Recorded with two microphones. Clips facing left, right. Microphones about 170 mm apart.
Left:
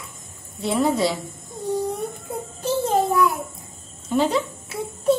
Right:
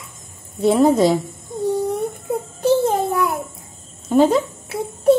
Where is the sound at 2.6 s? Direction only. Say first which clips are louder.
Right 4 dB; 60° right (ahead or behind).